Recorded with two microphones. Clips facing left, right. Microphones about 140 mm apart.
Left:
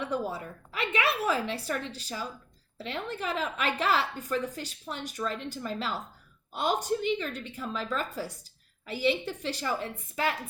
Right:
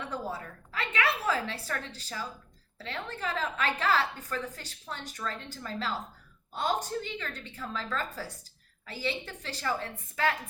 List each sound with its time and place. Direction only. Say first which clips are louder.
0.1 s a woman's voice: left 4 dB; 15° left (ahead or behind)